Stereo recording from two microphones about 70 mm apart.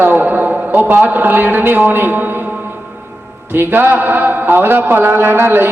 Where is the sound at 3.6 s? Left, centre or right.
Right.